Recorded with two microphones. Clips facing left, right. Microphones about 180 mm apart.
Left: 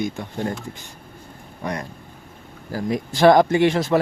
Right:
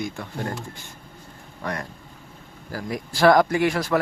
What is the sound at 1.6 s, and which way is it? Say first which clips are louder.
Speech: left 2 dB; 15° left (ahead or behind).